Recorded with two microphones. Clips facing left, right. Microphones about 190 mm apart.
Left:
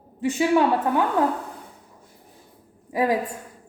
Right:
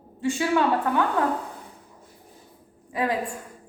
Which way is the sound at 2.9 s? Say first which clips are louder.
Left 4 dB; 15° left (ahead or behind).